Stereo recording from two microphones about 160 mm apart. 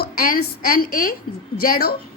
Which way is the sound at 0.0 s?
65° left (ahead or behind).